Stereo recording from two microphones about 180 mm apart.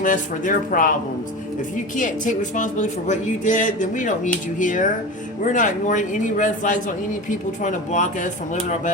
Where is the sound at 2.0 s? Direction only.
45° left (ahead or behind).